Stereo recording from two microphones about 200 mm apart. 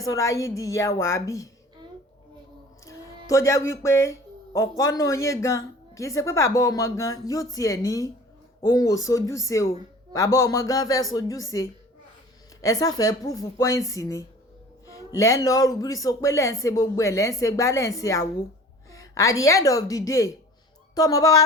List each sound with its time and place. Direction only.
0.0 s a woman's voice: 15° left (ahead or behind)
2.8 s a sound: 15° left (ahead or behind)
4.8 s a woman's voice: 15° left (ahead or behind)
12.6 s a woman's voice: 20° left (ahead or behind)